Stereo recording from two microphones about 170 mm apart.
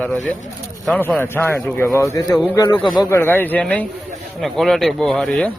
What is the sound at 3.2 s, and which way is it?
Speech, 10° left (ahead or behind).